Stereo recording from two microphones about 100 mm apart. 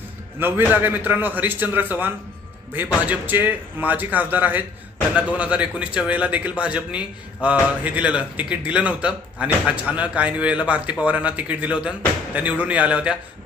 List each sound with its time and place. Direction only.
0.3 s a man's voice: 20° right (ahead or behind)